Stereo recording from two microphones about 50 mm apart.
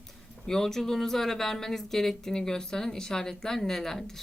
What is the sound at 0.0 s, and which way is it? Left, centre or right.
Speech, centre.